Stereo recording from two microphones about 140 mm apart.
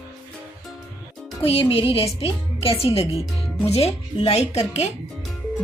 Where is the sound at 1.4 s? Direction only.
40° left (ahead or behind).